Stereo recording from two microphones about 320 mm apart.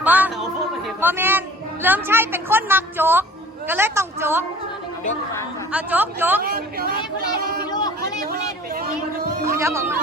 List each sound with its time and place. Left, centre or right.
0.0 s music: centre
1.0 s a woman's voice: centre
5.7 s speech: centre
6.4 s speech: right
7.7 s speech: centre
8.0 s speech: right
9.4 s a woman's voice: centre